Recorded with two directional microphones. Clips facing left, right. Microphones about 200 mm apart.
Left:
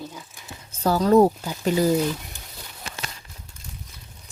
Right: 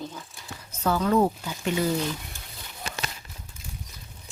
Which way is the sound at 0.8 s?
35° left (ahead or behind).